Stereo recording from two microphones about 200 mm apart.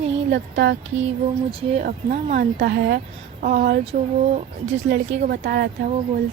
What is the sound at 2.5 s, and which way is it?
Speech, 55° right (ahead or behind).